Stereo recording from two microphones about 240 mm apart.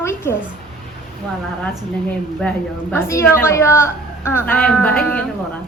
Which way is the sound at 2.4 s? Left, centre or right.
Centre.